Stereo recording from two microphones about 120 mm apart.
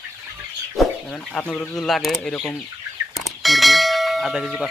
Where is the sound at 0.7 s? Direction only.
10° left (ahead or behind).